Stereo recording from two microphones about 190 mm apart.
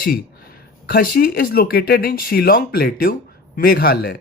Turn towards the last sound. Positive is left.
turn(degrees=55)  # may be behind; listen again after turning